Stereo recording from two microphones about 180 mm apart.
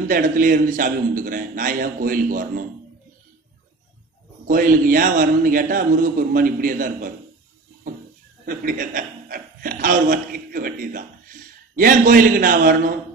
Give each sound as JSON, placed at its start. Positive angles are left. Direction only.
{"t": 0.1, "sound": "a man's voice", "side_deg": -50}
{"t": 4.5, "sound": "a man's voice", "side_deg": -50}
{"t": 8.5, "sound": "a man's voice", "side_deg": -50}